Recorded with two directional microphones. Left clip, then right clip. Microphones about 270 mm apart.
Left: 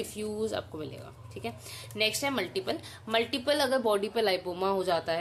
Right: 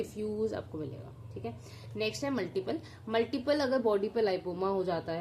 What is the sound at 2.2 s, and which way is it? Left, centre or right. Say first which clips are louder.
A woman's voice: left 3 dB; centre.